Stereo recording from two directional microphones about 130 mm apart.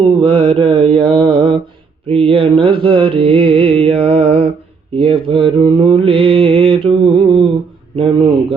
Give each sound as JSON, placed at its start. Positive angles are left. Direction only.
{"t": 0.2, "sound": "mantra", "side_deg": -45}
{"t": 4.9, "sound": "speech", "side_deg": -45}
{"t": 5.6, "sound": "mantra", "side_deg": -35}
{"t": 7.9, "sound": "a man's voice", "side_deg": -45}